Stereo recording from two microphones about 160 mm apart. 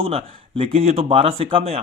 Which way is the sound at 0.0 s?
35° right (ahead or behind).